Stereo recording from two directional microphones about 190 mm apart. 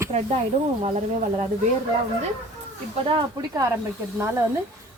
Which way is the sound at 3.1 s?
25° right (ahead or behind).